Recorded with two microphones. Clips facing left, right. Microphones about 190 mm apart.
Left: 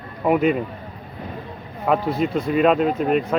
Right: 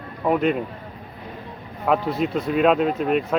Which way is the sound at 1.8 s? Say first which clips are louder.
Left 1 dB; centre (ahead or behind).